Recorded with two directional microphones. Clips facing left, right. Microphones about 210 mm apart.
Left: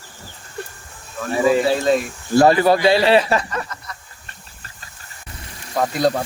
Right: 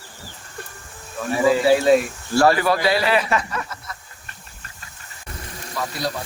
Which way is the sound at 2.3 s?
20° left (ahead or behind).